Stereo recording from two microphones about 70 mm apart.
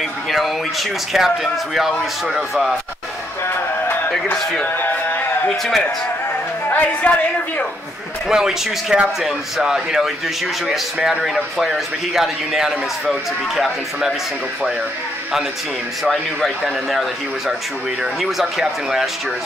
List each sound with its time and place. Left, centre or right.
0.3 s speech: centre
4.7 s music: left
5.6 s speech: centre
6.7 s a man's voice: left
8.3 s speech: centre
16.3 s a man's voice: centre
18.2 s speech: centre